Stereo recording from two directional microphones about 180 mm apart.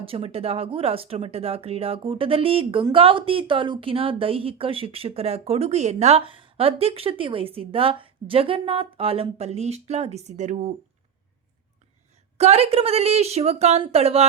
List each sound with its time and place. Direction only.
0.0 s speech: 30° right (ahead or behind)
12.4 s speech: 35° right (ahead or behind)